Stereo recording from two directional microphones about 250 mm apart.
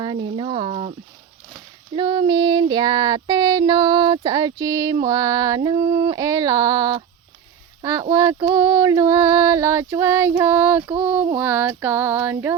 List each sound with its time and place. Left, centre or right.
0.0 s speech: centre
1.9 s female singing: centre
7.8 s speech: centre
8.1 s female singing: centre